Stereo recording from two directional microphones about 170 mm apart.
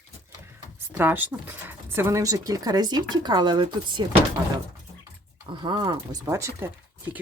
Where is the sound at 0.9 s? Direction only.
10° right (ahead or behind); by 4.0 s 25° right (ahead or behind).